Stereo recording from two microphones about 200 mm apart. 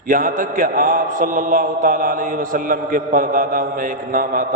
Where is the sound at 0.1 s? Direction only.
40° right (ahead or behind).